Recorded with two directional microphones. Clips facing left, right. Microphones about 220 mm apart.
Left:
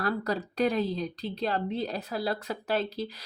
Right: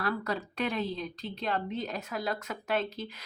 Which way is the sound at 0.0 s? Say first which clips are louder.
Left 3 dB; 35° left (ahead or behind).